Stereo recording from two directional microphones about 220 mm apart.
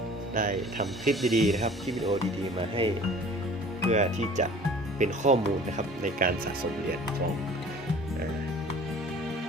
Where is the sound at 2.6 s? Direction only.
25° right (ahead or behind).